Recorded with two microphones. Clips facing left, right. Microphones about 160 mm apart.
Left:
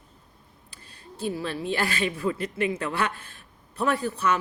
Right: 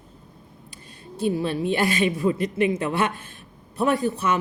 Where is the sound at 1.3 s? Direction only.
20° right (ahead or behind).